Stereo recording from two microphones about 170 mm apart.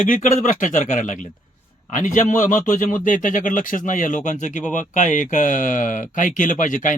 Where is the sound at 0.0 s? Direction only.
50° left (ahead or behind).